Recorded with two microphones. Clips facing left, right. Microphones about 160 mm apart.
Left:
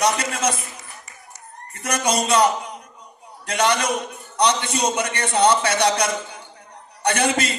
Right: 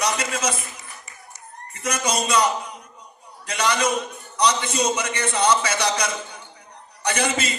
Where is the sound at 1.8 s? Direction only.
60° left (ahead or behind).